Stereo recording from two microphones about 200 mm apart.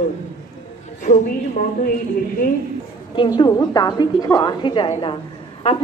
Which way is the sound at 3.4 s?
20° left (ahead or behind).